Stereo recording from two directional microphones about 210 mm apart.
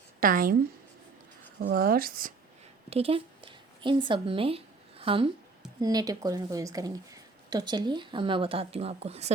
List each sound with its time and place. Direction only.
0.2 s speech: 40° right (ahead or behind)
1.6 s speech: 45° right (ahead or behind)
2.9 s a woman's voice: 25° right (ahead or behind)